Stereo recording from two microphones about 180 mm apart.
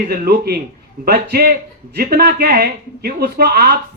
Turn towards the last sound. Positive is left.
turn(degrees=-60)  # may be behind; listen again after turning